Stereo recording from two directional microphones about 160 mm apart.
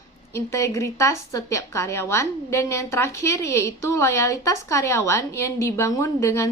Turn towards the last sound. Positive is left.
turn(degrees=15)  # may be behind; listen again after turning